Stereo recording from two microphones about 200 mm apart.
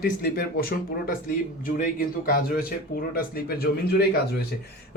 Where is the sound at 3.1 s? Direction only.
50° left (ahead or behind).